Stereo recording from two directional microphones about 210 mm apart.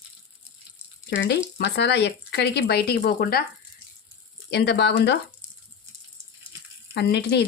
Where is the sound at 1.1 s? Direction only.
55° left (ahead or behind).